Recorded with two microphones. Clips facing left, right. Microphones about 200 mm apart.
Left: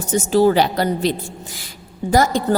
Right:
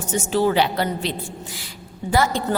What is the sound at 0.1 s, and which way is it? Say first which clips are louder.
A woman's voice: left 5 dB; 40° left (ahead or behind).